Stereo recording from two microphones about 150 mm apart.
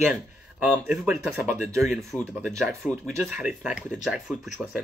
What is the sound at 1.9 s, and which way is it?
Speech, centre (ahead or behind).